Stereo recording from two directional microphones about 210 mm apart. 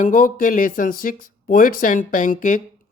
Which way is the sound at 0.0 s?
40° left (ahead or behind).